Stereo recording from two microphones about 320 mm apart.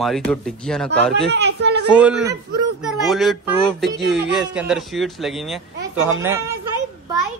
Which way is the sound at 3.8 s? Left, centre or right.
Right.